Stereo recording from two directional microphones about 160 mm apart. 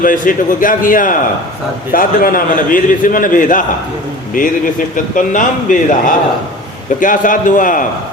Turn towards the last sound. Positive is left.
turn(degrees=55)  # may be behind; listen again after turning